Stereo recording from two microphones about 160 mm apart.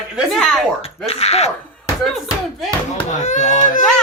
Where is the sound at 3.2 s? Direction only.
50° left (ahead or behind).